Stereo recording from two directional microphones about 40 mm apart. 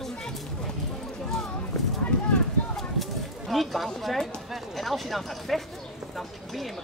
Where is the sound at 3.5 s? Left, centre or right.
Centre.